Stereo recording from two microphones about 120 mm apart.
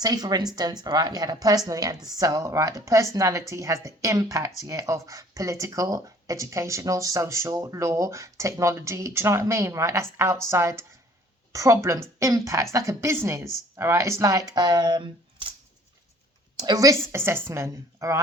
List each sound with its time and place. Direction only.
0.0 s speech: 35° right (ahead or behind)
16.6 s speech: 30° right (ahead or behind)